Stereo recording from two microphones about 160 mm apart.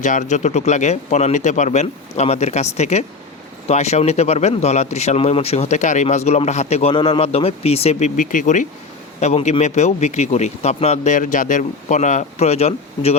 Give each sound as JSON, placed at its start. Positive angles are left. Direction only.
{"t": 0.0, "sound": "a man's voice", "side_deg": 50}